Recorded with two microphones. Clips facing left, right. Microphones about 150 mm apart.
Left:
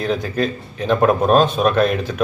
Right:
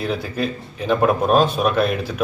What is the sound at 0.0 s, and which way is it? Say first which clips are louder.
A man's voice: left 3 dB; 5° right (ahead or behind).